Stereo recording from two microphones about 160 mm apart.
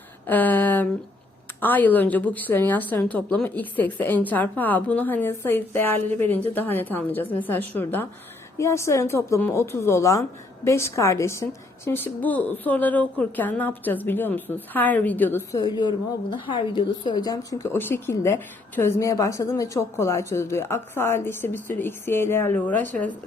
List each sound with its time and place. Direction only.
0.3 s a sound: 10° left (ahead or behind)
1.6 s a woman's voice: 10° left (ahead or behind)
15.5 s a woman's voice: 25° left (ahead or behind); by 22.8 s 10° left (ahead or behind)